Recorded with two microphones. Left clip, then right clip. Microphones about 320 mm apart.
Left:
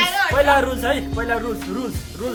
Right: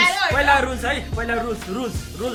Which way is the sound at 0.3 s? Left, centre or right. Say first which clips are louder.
Left 1 dB; centre.